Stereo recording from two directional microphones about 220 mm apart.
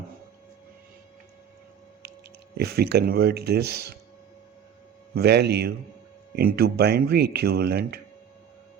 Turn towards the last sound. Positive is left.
turn(degrees=-45)  # may be behind; listen again after turning